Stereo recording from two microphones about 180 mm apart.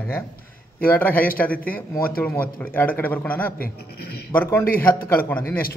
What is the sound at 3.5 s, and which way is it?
Speech, 55° left (ahead or behind).